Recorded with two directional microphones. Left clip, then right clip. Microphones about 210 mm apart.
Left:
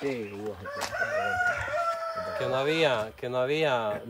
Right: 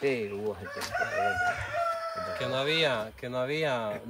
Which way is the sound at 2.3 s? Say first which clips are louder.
Left 2 dB; 30° left (ahead or behind).